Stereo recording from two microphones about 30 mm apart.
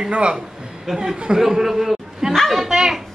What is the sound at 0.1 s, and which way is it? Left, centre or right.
Speech, right.